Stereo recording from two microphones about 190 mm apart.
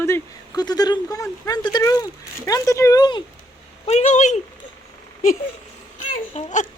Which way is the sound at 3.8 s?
35° left (ahead or behind).